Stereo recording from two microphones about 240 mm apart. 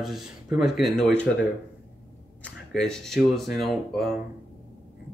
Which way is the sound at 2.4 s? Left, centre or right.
Centre.